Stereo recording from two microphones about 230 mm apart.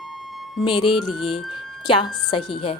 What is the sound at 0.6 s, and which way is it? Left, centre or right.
Speech, left.